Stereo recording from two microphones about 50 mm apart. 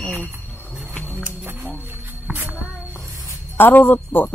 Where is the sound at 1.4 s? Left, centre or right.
Right.